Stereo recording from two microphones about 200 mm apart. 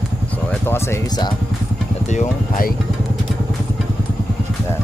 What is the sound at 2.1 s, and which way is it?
Speech, 45° left (ahead or behind).